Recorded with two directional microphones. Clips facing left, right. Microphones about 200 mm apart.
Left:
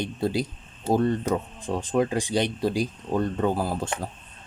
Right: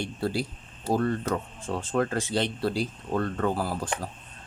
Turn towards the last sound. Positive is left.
turn(degrees=20)  # may be behind; listen again after turning